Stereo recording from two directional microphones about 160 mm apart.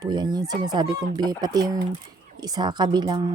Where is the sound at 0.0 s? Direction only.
25° right (ahead or behind).